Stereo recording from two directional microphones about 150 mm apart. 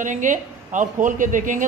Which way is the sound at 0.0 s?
60° right (ahead or behind).